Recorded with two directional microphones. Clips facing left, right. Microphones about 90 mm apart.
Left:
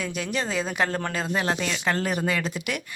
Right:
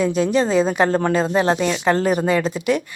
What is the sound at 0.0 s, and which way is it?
Speech, 30° right (ahead or behind).